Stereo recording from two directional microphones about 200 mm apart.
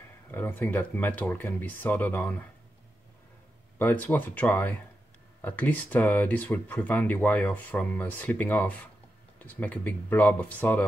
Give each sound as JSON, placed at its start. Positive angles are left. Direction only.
{"t": 0.3, "sound": "speech", "side_deg": 10}
{"t": 3.7, "sound": "speech", "side_deg": 10}